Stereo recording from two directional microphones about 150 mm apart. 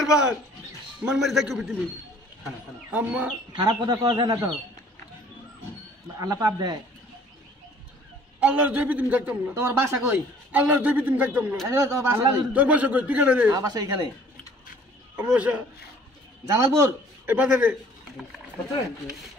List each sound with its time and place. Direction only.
1.0 s a man's voice: 5° right (ahead or behind)
2.9 s a man's voice: 10° right (ahead or behind)
3.5 s a man's voice: 30° right (ahead or behind)
6.1 s a man's voice: 25° right (ahead or behind)
8.4 s a man's voice: 10° right (ahead or behind)
13.5 s a man's voice: 25° right (ahead or behind)
15.1 s a man's voice: 10° right (ahead or behind)
16.4 s a man's voice: 20° right (ahead or behind)